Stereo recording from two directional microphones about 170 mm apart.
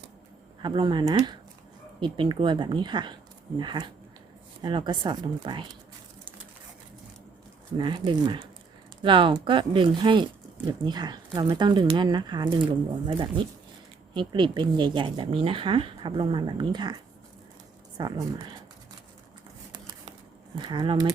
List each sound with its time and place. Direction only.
0.6 s speech: 30° right (ahead or behind)
7.8 s speech: 30° right (ahead or behind)
20.6 s speech: 25° right (ahead or behind)